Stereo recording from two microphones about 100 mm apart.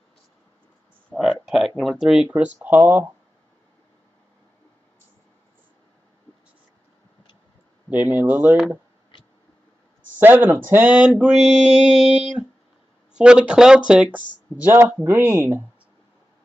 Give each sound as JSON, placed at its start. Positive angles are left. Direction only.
{"t": 1.1, "sound": "a sound", "side_deg": -5}
{"t": 1.8, "sound": "speech", "side_deg": 0}
{"t": 2.2, "sound": "speech", "side_deg": -15}
{"t": 7.9, "sound": "speech", "side_deg": -15}
{"t": 10.1, "sound": "speech", "side_deg": -20}
{"t": 15.0, "sound": "speech", "side_deg": -25}